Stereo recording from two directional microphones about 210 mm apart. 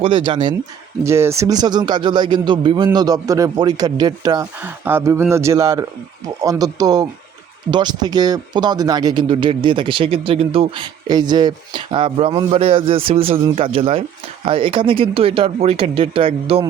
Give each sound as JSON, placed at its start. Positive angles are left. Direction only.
{"t": 0.0, "sound": "speech", "side_deg": -25}